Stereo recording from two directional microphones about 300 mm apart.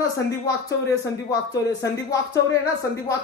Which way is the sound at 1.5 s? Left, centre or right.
Centre.